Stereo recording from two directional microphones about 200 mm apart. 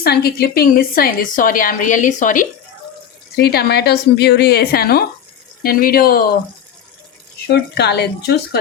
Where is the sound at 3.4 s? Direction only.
50° left (ahead or behind).